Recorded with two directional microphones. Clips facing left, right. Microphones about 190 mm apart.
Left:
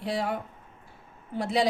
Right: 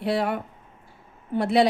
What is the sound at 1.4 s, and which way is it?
Speech, 65° right (ahead or behind).